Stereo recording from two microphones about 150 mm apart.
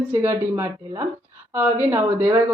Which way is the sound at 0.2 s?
15° right (ahead or behind).